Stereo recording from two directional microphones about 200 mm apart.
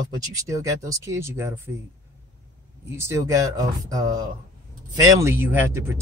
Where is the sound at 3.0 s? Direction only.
15° right (ahead or behind).